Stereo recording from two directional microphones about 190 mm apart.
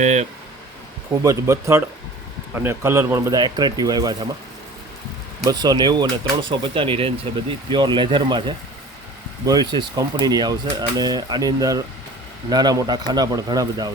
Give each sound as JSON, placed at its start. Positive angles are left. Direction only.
{"t": 0.0, "sound": "speech", "side_deg": -35}
{"t": 1.2, "sound": "speech", "side_deg": -15}
{"t": 5.5, "sound": "speech", "side_deg": -20}